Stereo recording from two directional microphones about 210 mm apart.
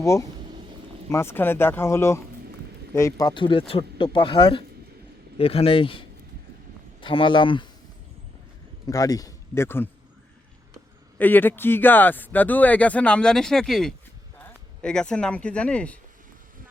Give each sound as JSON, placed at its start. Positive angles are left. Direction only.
{"t": 0.0, "sound": "speech", "side_deg": 15}
{"t": 8.9, "sound": "a man's voice", "side_deg": 15}
{"t": 11.2, "sound": "speech", "side_deg": 10}